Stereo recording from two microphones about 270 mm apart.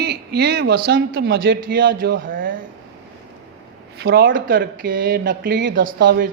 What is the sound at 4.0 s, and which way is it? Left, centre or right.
Speech, right.